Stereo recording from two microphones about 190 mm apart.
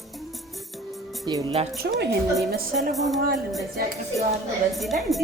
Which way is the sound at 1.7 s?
60° right (ahead or behind).